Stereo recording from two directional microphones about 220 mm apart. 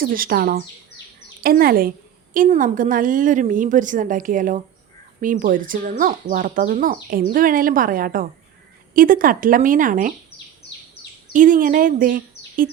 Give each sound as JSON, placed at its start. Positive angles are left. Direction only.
{"t": 0.0, "sound": "a woman's voice", "side_deg": -40}
{"t": 11.3, "sound": "speech", "side_deg": -35}